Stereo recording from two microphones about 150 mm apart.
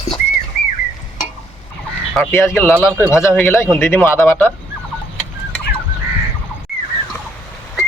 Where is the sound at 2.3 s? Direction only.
15° left (ahead or behind).